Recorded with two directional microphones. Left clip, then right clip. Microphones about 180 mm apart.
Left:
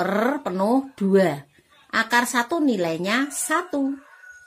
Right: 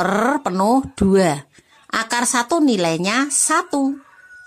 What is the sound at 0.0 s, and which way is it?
Speech, 35° right (ahead or behind).